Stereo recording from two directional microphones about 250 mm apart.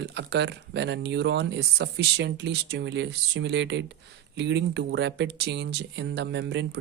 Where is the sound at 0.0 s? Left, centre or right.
Right.